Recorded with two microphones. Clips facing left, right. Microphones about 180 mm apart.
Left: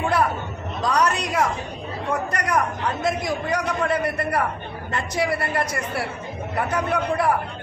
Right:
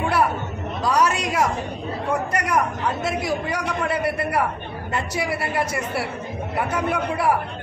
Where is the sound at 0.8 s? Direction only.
5° right (ahead or behind).